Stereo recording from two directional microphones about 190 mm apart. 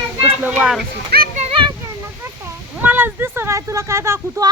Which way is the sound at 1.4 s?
30° right (ahead or behind).